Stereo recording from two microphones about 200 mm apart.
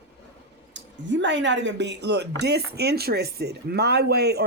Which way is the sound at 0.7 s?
65° right (ahead or behind).